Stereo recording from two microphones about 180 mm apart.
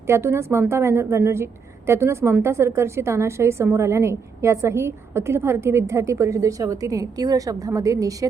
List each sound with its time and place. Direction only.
0.1 s a woman's voice: 15° right (ahead or behind)